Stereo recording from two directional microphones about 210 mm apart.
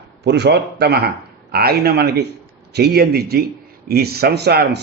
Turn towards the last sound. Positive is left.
turn(degrees=-50)  # may be behind; listen again after turning